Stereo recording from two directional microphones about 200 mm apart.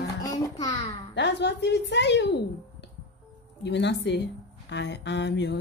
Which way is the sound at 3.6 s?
60° left (ahead or behind).